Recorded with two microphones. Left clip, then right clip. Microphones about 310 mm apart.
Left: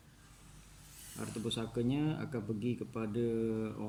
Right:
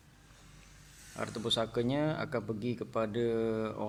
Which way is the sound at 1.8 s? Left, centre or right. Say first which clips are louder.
Right 4 dB; centre.